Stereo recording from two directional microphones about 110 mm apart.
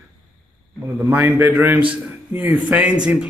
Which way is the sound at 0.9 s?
15° right (ahead or behind).